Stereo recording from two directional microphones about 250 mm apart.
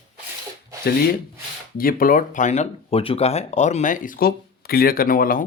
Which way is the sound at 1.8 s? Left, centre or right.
Left.